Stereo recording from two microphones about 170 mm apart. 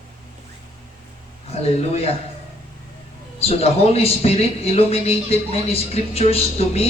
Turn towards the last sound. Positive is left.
turn(degrees=35)  # may be behind; listen again after turning